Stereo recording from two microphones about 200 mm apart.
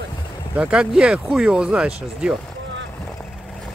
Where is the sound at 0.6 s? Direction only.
5° right (ahead or behind).